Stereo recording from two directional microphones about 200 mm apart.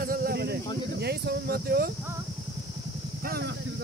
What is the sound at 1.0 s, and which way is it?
Speech, 55° right (ahead or behind).